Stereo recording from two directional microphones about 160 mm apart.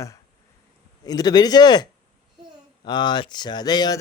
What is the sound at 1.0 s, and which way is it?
Speech, 25° left (ahead or behind).